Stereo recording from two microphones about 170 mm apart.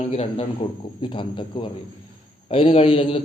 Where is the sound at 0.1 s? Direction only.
35° left (ahead or behind).